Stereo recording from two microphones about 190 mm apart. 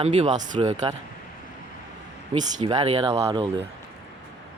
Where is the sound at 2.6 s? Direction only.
25° right (ahead or behind).